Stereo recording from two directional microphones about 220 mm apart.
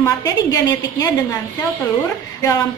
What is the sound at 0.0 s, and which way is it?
A woman's voice, 15° left (ahead or behind).